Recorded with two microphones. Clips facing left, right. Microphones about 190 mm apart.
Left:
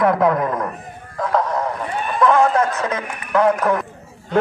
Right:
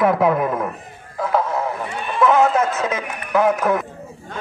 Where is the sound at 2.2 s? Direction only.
5° right (ahead or behind).